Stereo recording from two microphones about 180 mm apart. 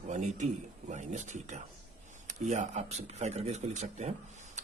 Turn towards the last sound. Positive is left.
turn(degrees=-40)  # may be behind; listen again after turning